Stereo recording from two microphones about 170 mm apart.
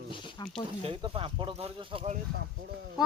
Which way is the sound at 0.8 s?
35° right (ahead or behind).